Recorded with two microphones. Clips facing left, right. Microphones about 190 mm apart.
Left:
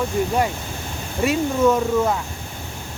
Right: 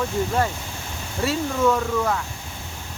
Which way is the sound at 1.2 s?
15° left (ahead or behind).